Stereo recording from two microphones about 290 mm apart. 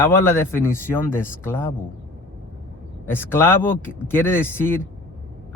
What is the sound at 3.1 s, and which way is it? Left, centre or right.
Speech, centre.